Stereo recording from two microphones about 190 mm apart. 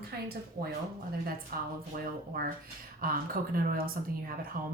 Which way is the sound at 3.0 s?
50° right (ahead or behind).